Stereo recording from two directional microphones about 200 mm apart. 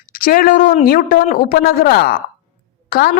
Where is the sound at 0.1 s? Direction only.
45° left (ahead or behind).